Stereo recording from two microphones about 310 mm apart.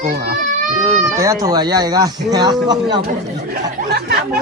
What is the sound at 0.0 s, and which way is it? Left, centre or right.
Speech, right.